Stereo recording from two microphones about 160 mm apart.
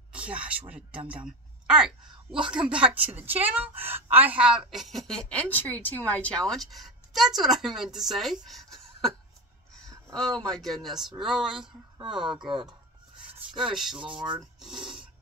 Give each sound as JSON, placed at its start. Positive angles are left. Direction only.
{"t": 0.1, "sound": "a woman's voice", "side_deg": -10}
{"t": 10.4, "sound": "a woman's voice", "side_deg": 0}
{"t": 14.2, "sound": "filing", "side_deg": -5}